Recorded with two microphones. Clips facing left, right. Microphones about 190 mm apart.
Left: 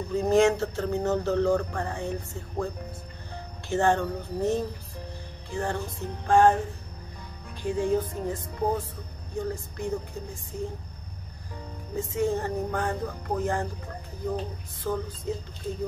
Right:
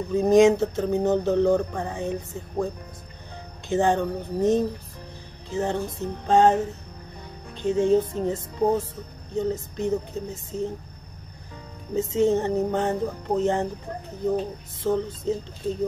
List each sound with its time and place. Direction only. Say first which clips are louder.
0.1 s a sound: right 5 dB; 15° right (ahead or behind)
5.5 s music: right 4 dB; 20° right (ahead or behind)
7.5 s music: right 6 dB; 25° right (ahead or behind)
11.9 s music: right 6 dB; 25° right (ahead or behind)